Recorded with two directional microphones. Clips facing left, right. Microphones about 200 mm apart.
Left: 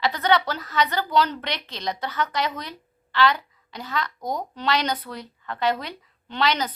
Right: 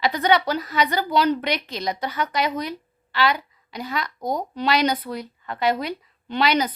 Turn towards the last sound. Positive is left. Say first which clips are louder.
# right 3 dB
turn(degrees=-10)  # may be behind; listen again after turning